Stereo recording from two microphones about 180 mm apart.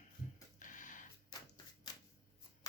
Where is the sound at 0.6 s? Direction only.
45° left (ahead or behind).